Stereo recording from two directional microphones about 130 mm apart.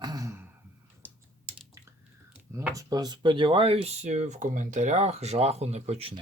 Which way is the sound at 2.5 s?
25° right (ahead or behind).